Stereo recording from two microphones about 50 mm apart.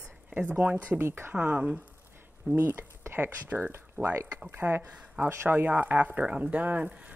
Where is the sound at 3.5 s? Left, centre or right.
Right.